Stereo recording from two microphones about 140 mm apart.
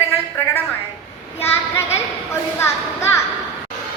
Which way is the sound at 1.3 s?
20° left (ahead or behind).